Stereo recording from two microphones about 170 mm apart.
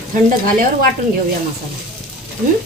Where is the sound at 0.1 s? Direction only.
55° right (ahead or behind).